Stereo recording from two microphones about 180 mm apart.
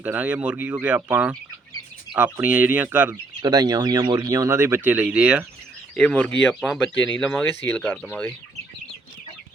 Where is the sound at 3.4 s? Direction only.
20° right (ahead or behind); by 5.5 s 5° right (ahead or behind).